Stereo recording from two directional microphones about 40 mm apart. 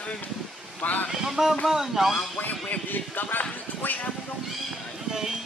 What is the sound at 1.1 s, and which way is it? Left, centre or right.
Speech, centre.